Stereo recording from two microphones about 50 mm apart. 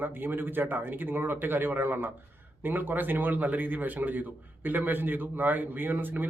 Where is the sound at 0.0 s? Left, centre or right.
Right.